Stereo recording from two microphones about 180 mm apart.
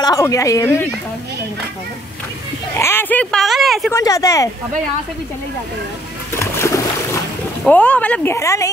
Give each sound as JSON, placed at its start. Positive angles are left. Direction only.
{"t": 0.0, "sound": "speech", "side_deg": 20}
{"t": 2.8, "sound": "speech", "side_deg": 10}
{"t": 3.9, "sound": "speech", "side_deg": 20}
{"t": 6.4, "sound": "splash", "side_deg": 15}
{"t": 7.6, "sound": "speech", "side_deg": 5}